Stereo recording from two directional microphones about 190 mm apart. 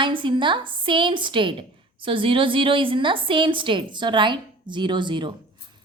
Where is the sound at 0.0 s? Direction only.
25° right (ahead or behind).